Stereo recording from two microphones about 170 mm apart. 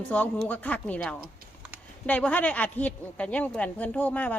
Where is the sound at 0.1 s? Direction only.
10° left (ahead or behind).